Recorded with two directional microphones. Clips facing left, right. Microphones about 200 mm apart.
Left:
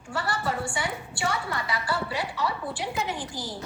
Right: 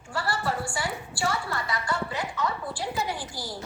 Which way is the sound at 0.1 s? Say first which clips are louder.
Even; centre (ahead or behind).